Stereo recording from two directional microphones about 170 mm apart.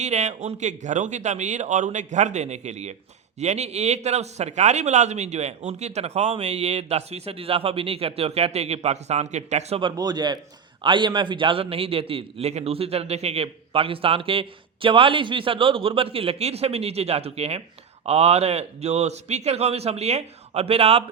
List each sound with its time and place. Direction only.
0.0 s a man's voice: 40° right (ahead or behind)